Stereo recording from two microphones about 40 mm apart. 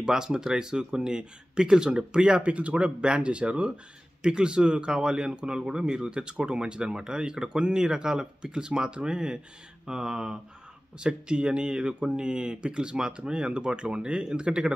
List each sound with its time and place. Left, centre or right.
0.0 s speech: centre
2.4 s speech: right